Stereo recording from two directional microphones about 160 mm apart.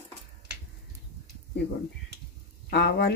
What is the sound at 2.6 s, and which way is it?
Speech, 90° left.